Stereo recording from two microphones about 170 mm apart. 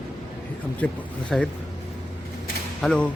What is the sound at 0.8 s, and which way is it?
Speech, 10° left (ahead or behind).